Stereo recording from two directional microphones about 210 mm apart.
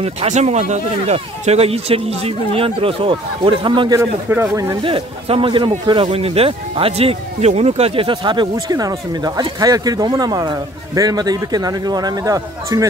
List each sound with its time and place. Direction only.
0.0 s a man's voice: 30° right (ahead or behind); by 4.7 s 15° right (ahead or behind)
4.8 s a man's voice: 25° right (ahead or behind)